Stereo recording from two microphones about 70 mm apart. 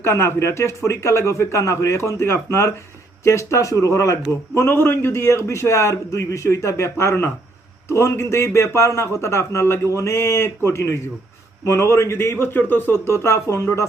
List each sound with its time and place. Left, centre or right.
0.0 s a man's voice: left
4.6 s a man's voice: left